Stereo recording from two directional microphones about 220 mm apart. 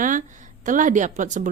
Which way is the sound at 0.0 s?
35° right (ahead or behind).